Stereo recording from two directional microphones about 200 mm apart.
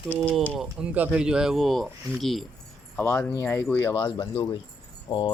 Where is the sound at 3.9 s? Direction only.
25° left (ahead or behind).